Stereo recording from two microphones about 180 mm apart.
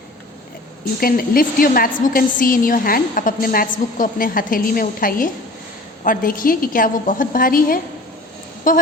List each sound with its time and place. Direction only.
0.9 s a woman's voice: 55° left (ahead or behind)